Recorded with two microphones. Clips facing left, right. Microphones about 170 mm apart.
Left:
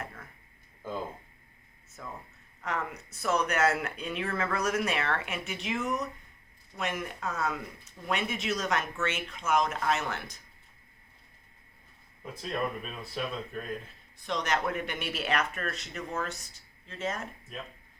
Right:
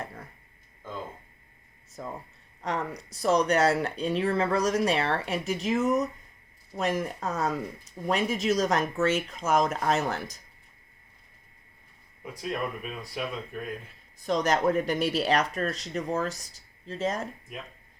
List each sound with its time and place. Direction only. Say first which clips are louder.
0.0 s a sound: right 3 dB; 35° right (ahead or behind)
2.0 s speech: right 5 dB; 35° right (ahead or behind)
12.2 s speech: right 1 dB; 10° right (ahead or behind)
14.2 s speech: right 6 dB; 45° right (ahead or behind)
17.5 s speech: right 1 dB; 15° right (ahead or behind)